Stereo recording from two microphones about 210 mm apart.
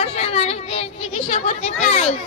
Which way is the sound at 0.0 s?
30° left (ahead or behind).